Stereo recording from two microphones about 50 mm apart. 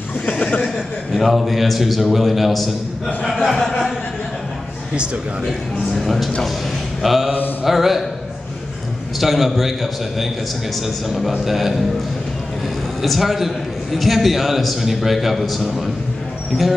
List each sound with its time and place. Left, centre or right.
0.3 s a sound: left
1.1 s a man's voice: centre
5.9 s a man's voice: centre
7.0 s mantra: centre
7.6 s a man's voice: centre
9.2 s a man's voice: centre
13.0 s a man's voice: centre